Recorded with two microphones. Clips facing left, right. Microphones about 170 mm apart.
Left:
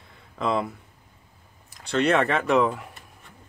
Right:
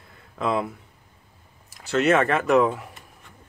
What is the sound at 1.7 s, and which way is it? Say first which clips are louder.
Speech: right 2 dB; 5° right (ahead or behind).